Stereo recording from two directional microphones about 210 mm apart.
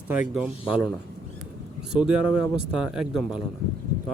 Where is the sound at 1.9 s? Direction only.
5° right (ahead or behind).